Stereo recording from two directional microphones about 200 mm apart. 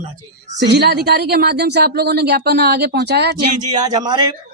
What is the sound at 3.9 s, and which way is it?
Speech, 20° right (ahead or behind).